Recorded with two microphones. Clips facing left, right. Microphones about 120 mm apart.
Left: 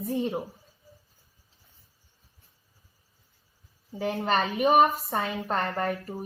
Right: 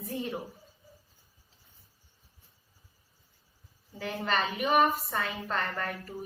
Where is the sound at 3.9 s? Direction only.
40° left (ahead or behind).